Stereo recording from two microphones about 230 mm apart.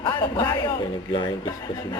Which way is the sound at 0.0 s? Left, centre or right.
Centre.